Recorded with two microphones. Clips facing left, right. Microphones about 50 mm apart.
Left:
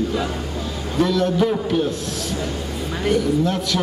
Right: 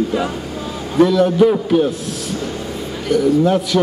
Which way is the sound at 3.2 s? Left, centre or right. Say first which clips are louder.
Right 6 dB; centre.